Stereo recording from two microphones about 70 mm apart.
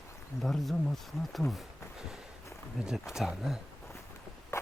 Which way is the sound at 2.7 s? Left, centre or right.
Centre.